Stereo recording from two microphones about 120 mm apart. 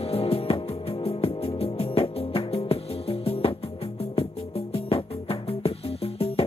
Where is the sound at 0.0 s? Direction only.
55° left (ahead or behind).